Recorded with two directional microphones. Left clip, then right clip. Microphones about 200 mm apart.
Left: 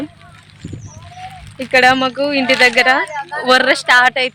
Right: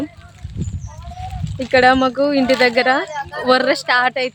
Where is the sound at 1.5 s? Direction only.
25° right (ahead or behind).